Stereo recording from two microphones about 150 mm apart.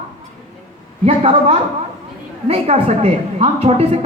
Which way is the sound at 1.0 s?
40° right (ahead or behind).